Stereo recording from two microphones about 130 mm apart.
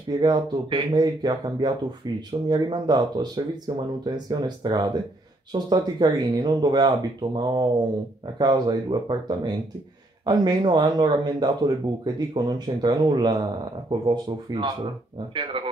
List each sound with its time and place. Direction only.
0.1 s speech: 35° right (ahead or behind)